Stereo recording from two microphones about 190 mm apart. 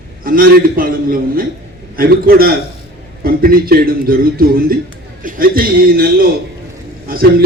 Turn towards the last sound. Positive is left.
turn(degrees=-50)  # may be behind; listen again after turning